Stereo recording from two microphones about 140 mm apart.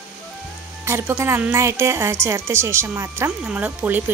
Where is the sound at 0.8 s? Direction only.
15° right (ahead or behind).